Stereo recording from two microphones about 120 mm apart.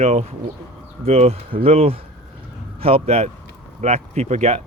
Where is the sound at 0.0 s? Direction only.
65° right (ahead or behind).